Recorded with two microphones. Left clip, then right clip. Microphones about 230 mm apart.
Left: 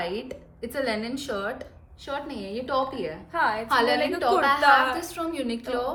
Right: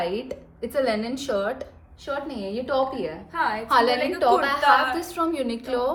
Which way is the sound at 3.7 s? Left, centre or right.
Centre.